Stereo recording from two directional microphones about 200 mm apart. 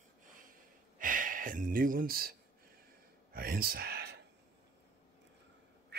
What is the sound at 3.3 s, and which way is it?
Speech, 50° right (ahead or behind).